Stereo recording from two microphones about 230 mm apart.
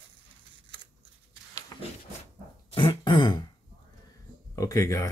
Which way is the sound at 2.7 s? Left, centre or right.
Left.